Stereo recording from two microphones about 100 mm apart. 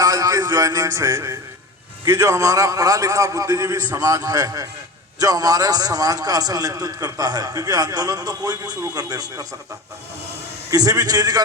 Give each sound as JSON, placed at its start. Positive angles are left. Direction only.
{"t": 0.0, "sound": "music", "side_deg": -35}
{"t": 2.0, "sound": "a man's voice", "side_deg": -30}
{"t": 10.7, "sound": "a man's voice", "side_deg": -40}